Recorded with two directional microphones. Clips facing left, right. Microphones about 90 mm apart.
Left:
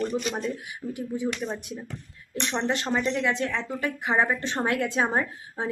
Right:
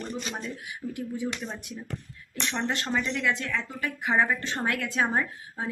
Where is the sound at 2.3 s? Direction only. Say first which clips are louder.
Left 3 dB; 25° left (ahead or behind).